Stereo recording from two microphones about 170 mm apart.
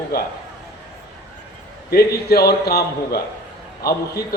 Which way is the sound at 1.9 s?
65° left (ahead or behind).